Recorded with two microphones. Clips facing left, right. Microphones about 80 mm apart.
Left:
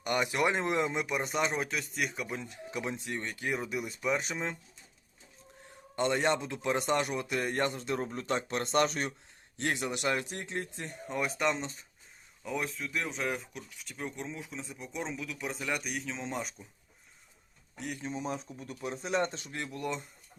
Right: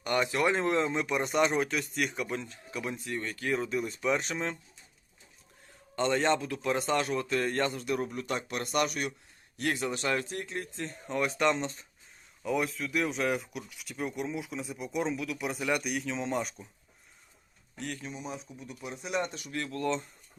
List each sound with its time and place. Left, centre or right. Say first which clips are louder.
0.0 s speech: right 1 dB; centre
2.5 s a man's voice: even; left; by 4.5 s centre
6.0 s a man's voice: right 2 dB; centre
11.1 s speech: right 3 dB; centre
18.0 s a man's voice: left 4 dB; left; by 20.0 s centre